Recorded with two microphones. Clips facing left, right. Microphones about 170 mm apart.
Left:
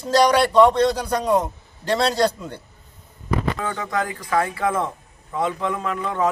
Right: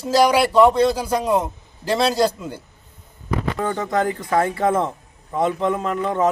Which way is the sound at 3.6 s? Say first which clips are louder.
Right 4 dB; 35° right (ahead or behind).